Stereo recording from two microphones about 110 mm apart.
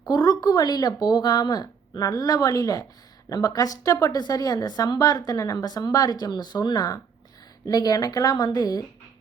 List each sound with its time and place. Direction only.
0.0 s a woman's voice: 35° left (ahead or behind)